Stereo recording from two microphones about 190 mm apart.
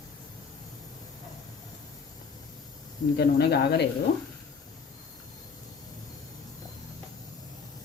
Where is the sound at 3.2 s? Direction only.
60° left (ahead or behind).